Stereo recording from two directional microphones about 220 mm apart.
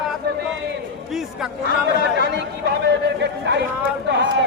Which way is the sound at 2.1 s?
50° right (ahead or behind).